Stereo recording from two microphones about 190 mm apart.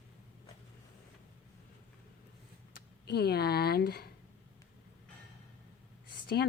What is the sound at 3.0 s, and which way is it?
Speech, 60° left (ahead or behind).